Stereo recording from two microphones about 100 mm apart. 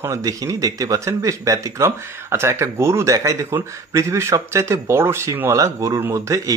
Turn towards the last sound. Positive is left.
turn(degrees=-30)  # may be behind; listen again after turning